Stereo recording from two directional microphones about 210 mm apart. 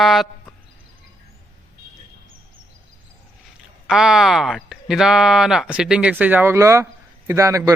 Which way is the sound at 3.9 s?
5° right (ahead or behind).